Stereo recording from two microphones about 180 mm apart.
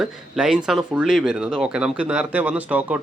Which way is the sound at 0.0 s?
5° right (ahead or behind).